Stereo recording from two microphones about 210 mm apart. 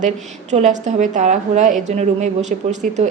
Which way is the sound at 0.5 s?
35° right (ahead or behind).